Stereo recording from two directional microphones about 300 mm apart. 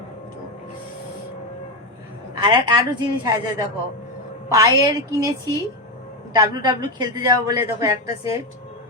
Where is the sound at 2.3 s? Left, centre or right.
Centre.